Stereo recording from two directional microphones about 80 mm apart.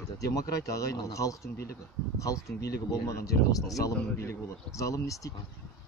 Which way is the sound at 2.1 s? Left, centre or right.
Left.